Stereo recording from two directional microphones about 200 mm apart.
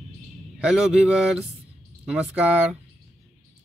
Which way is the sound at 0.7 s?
5° right (ahead or behind).